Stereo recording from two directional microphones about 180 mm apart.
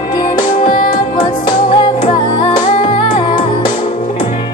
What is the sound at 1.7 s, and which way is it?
Music, 30° left (ahead or behind).